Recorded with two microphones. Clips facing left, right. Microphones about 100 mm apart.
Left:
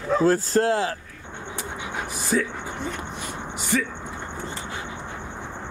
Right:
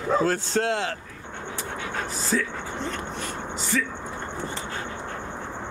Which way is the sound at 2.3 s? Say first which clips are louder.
Left 3 dB; 20° left (ahead or behind).